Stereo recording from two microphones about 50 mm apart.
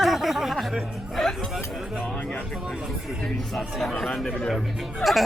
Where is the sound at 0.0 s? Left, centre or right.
Centre.